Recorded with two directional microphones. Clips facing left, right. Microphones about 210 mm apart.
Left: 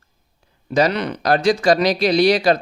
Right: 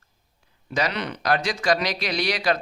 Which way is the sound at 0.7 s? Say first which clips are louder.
Left 8 dB; 35° left (ahead or behind).